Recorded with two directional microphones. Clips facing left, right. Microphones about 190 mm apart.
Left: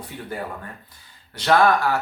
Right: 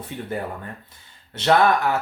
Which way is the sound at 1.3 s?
25° right (ahead or behind).